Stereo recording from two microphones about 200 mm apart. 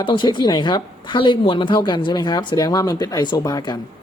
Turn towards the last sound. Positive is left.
turn(degrees=20)  # may be behind; listen again after turning